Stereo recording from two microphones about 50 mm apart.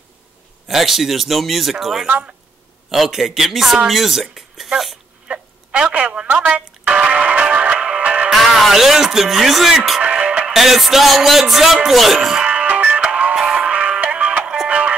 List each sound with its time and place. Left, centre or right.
0.7 s speech: centre
2.0 s speech: right
2.9 s speech: centre
5.3 s a sound: right
6.5 s music: right
8.3 s speech: centre
10.0 s music: right
10.5 s speech: centre
12.4 s music: right